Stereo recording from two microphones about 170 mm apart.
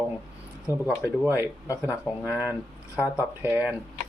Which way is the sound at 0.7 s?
20° left (ahead or behind).